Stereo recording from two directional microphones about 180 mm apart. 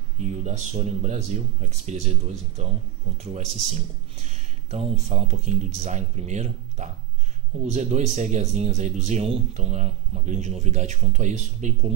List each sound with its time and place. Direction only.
0.2 s speech: 40° right (ahead or behind)